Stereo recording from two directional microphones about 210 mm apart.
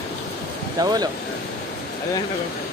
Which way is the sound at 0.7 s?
20° right (ahead or behind).